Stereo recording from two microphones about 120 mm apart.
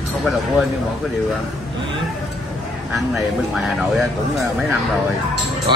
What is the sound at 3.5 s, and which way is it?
Speech, centre (ahead or behind).